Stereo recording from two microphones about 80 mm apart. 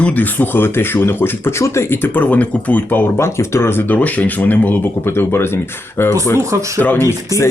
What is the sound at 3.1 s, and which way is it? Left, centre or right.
Speech, left.